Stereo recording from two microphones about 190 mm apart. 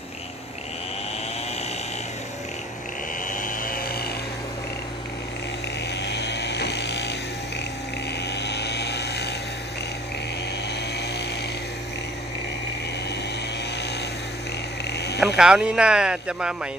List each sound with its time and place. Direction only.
3.3 s chainsaw: 45° left (ahead or behind)
6.0 s vehicle: 65° left (ahead or behind)
8.4 s vehicle: 65° left (ahead or behind)
14.9 s a sound: 60° left (ahead or behind)
15.4 s speech: 5° right (ahead or behind)